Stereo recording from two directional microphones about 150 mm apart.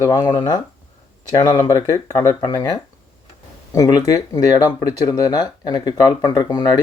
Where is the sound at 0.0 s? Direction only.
30° left (ahead or behind).